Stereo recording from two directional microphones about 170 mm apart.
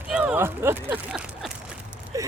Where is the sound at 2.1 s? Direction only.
20° right (ahead or behind).